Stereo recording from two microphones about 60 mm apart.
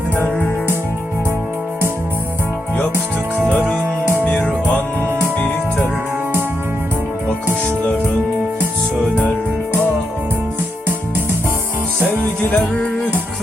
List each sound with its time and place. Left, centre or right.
4.3 s music: left
12.4 s music: left